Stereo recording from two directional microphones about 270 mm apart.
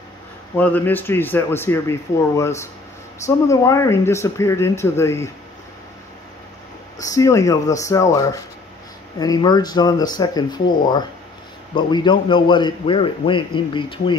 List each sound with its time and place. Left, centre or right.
0.6 s a man's voice: centre
7.0 s a man's voice: centre